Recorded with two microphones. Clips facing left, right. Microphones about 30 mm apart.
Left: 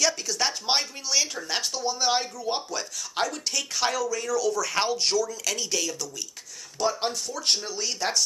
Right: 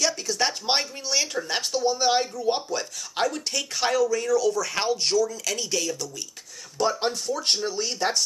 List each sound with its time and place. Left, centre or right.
0.0 s speech: centre
7.1 s speech: centre
7.4 s speech: centre